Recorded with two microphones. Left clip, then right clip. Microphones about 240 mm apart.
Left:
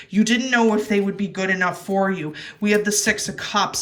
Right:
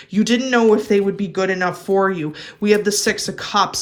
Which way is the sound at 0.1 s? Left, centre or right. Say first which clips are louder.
Right 2 dB; centre.